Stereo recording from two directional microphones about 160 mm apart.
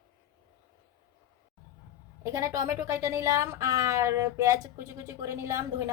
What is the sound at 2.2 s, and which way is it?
Speech, 20° right (ahead or behind).